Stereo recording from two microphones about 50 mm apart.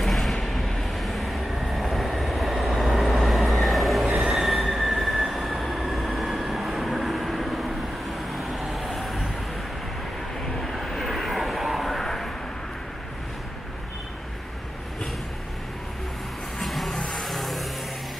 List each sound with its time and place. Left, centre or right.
0.0 s vehicle: centre
4.2 s train wheels squealing: centre
4.6 s train: centre
8.3 s vehicle: centre
10.4 s vehicle: centre
16.5 s vehicle: centre